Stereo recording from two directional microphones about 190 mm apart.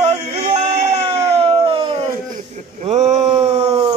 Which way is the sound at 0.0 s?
35° right (ahead or behind).